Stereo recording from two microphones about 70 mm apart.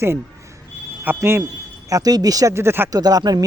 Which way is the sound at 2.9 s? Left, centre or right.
Right.